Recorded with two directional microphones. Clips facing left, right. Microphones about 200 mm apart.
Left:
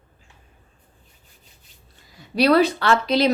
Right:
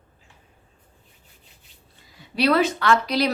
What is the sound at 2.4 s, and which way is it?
Speech, 40° left (ahead or behind).